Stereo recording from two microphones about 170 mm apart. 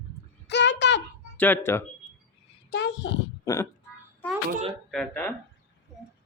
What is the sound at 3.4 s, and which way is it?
Speech, 15° left (ahead or behind).